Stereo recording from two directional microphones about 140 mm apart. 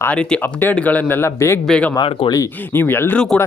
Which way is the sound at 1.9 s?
40° left (ahead or behind).